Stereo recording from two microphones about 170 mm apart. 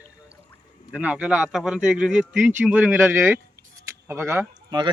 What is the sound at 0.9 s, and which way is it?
Speech, 5° right (ahead or behind).